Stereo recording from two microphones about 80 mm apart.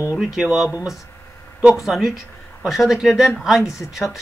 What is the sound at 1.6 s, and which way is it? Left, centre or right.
Speech, centre.